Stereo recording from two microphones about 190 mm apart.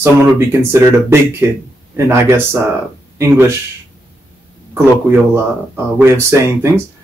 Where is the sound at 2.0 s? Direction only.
15° right (ahead or behind).